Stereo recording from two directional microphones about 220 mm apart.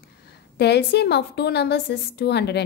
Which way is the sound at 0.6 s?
50° left (ahead or behind).